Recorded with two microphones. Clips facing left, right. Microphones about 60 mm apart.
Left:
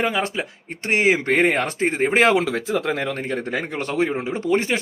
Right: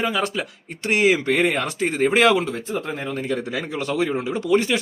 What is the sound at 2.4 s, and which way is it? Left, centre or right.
Speech, left.